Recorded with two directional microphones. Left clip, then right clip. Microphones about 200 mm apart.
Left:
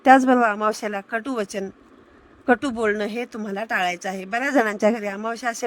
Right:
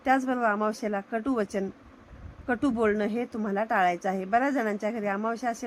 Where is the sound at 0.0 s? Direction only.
50° left (ahead or behind).